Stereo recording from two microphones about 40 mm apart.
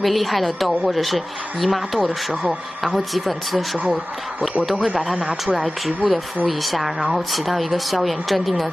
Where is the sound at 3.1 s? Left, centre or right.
Centre.